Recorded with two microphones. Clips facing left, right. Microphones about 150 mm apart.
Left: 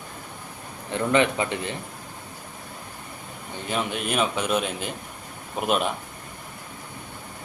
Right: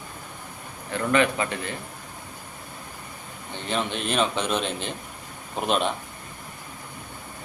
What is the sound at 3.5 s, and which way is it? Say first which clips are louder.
A man's voice: even; 10° left (ahead or behind).